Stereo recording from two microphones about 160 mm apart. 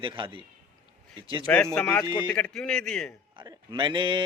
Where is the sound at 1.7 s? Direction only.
5° left (ahead or behind).